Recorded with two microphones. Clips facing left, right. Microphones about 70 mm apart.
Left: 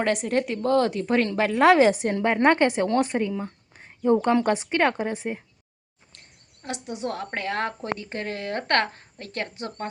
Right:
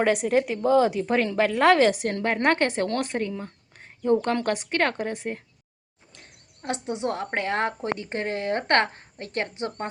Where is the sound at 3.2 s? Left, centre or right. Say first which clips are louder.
Left 3 dB; centre.